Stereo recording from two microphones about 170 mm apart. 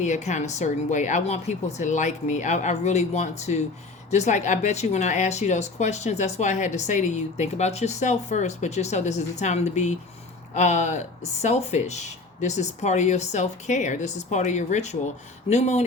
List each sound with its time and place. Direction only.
0.0 s speech: 45° left (ahead or behind)